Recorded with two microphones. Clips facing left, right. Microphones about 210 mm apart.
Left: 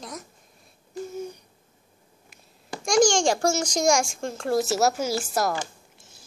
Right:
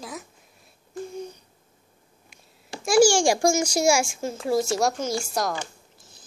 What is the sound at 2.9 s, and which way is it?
A child's voice, 10° right (ahead or behind).